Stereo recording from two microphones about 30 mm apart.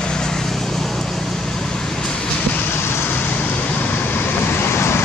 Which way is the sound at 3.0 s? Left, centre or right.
Left.